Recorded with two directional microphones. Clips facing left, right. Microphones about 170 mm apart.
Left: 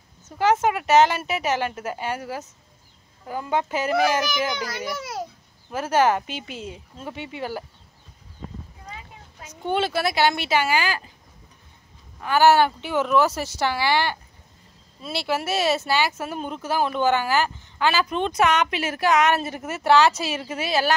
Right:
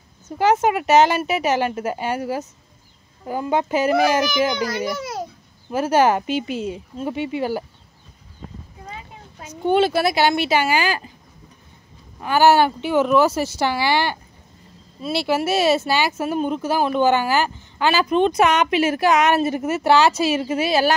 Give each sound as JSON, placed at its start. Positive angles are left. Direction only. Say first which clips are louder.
{"t": 0.4, "sound": "a woman's voice", "louder": "right 3 dB", "side_deg": -15}
{"t": 4.9, "sound": "babbling", "louder": "right 3 dB", "side_deg": 5}
{"t": 5.7, "sound": "a woman's voice", "louder": "right 3 dB", "side_deg": -10}
{"t": 8.8, "sound": "a sound", "louder": "right 4 dB", "side_deg": -30}
{"t": 9.7, "sound": "a woman's voice", "louder": "right 6 dB", "side_deg": -15}
{"t": 12.2, "sound": "a woman's voice", "louder": "right 2 dB", "side_deg": -10}